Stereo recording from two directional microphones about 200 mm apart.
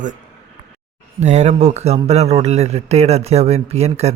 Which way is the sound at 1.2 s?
35° right (ahead or behind).